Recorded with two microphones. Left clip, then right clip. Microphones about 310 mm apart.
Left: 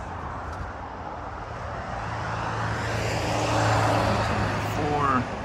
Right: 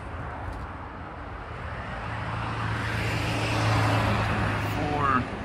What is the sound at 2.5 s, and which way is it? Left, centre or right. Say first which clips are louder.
Vehicle: left 1 dB; left.